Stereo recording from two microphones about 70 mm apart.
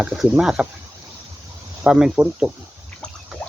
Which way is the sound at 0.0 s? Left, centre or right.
Centre.